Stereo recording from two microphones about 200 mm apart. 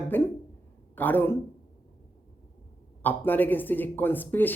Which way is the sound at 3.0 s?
10° left (ahead or behind).